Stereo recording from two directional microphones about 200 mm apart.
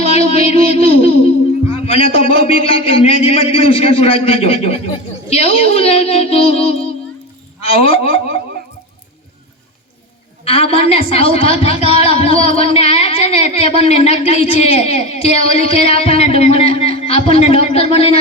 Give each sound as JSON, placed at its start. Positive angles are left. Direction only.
{"t": 0.0, "sound": "a woman's voice", "side_deg": 30}
{"t": 10.4, "sound": "a woman's voice", "side_deg": 30}